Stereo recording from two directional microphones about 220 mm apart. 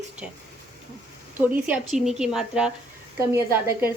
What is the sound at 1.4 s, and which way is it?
Speech, 5° right (ahead or behind).